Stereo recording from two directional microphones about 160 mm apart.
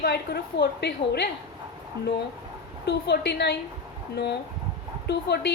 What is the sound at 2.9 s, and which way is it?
Speech, 90° left.